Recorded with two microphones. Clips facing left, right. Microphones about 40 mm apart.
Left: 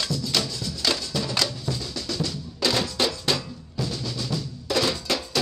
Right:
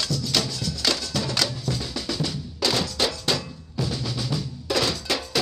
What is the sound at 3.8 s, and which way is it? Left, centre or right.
Drum, centre.